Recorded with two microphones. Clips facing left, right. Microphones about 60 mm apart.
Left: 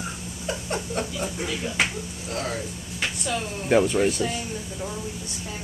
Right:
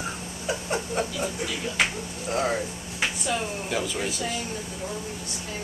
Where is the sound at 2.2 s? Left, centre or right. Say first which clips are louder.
Right 5 dB; right.